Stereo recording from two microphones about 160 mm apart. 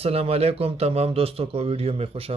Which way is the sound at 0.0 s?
40° right (ahead or behind).